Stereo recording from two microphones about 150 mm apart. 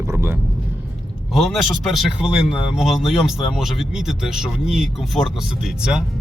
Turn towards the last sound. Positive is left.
turn(degrees=-5)  # may be behind; listen again after turning